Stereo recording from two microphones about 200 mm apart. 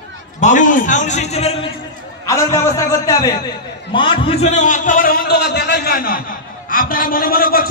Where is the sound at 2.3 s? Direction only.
15° left (ahead or behind).